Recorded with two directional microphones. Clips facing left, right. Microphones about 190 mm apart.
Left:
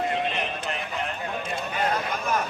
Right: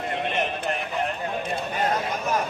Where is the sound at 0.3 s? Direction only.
50° right (ahead or behind).